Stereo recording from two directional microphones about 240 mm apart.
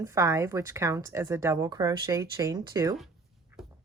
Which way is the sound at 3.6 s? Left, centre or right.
Centre.